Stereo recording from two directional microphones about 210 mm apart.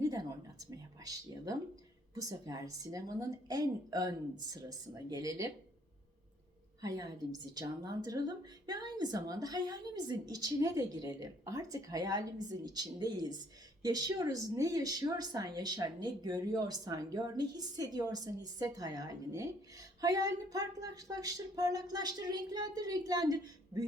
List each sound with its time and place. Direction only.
0.0 s a sound: 15° right (ahead or behind)
2.5 s speech: 15° right (ahead or behind)
6.8 s a woman's voice: 15° right (ahead or behind)